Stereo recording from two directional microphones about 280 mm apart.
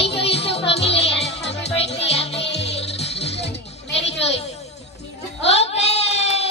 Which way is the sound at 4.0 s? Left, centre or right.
Left.